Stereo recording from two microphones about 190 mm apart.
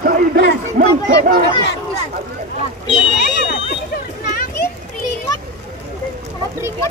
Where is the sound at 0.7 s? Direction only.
50° right (ahead or behind).